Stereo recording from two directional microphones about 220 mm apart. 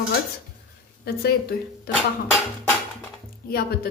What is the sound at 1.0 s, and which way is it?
A woman's voice, 45° left (ahead or behind).